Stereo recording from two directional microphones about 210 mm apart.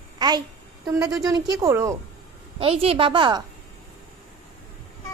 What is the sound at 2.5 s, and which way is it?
Speech, 25° right (ahead or behind).